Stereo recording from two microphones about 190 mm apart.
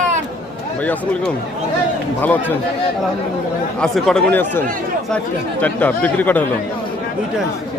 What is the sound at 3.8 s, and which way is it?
Speech, centre (ahead or behind).